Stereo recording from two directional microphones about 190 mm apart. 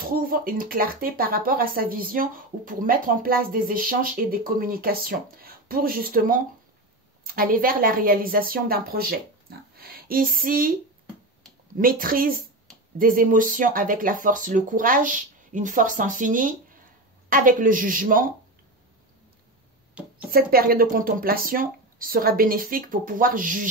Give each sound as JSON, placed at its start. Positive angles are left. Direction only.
{"t": 0.0, "sound": "a woman's voice", "side_deg": -50}
{"t": 11.8, "sound": "speech", "side_deg": -50}
{"t": 19.9, "sound": "a sound", "side_deg": -5}
{"t": 20.2, "sound": "speech", "side_deg": -50}